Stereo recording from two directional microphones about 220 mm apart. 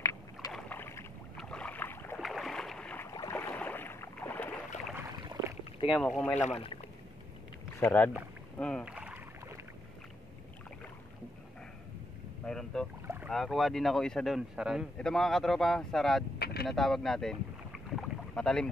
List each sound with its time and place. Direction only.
0.5 s boat: 5° left (ahead or behind)
5.9 s speech: centre (ahead or behind)
7.8 s speech: 5° left (ahead or behind)
8.5 s rowboat: 5° left (ahead or behind)
12.4 s speech: centre (ahead or behind)
13.0 s boat: 10° right (ahead or behind)
13.3 s speech: centre (ahead or behind)
16.3 s vehicle: 45° left (ahead or behind)
16.6 s boat: centre (ahead or behind)